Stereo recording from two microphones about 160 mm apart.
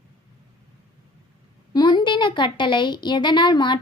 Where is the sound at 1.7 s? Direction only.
25° left (ahead or behind).